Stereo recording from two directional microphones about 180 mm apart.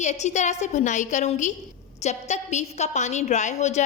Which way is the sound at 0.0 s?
40° left (ahead or behind).